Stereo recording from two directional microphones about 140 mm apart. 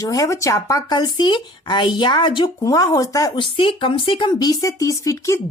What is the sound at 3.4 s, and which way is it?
Speech, 40° left (ahead or behind).